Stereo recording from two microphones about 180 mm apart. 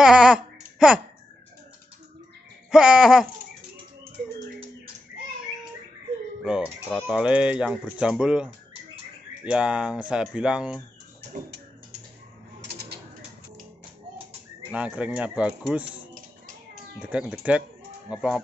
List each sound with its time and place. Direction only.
0.0 s a sound: 5° right (ahead or behind)
2.7 s speech: 5° right (ahead or behind)
6.4 s speech: 5° right (ahead or behind)
12.6 s bird: 65° right (ahead or behind)
14.7 s speech: 5° right (ahead or behind)